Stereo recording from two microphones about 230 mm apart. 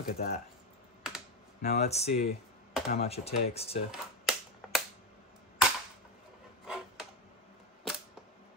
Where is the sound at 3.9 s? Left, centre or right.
Centre.